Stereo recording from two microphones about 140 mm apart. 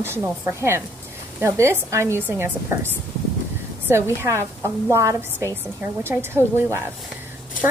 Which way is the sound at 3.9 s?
20° right (ahead or behind).